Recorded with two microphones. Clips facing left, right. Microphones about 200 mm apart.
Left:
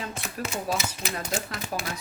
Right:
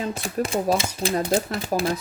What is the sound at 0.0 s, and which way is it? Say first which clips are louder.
Speech: right 8 dB; 30° right (ahead or behind).